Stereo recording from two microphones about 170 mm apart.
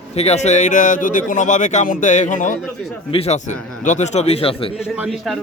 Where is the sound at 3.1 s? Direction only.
40° left (ahead or behind).